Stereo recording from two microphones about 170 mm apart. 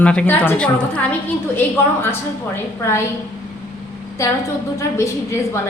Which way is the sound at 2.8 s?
15° left (ahead or behind).